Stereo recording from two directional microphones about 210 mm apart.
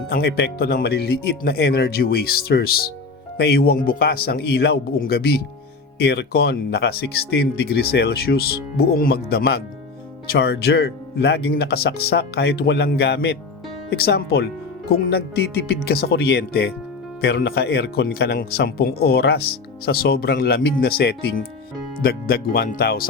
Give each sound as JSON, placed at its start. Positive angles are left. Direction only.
{"t": 0.1, "sound": "speech", "side_deg": 50}